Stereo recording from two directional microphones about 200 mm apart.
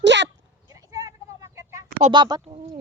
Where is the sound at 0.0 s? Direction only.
60° right (ahead or behind).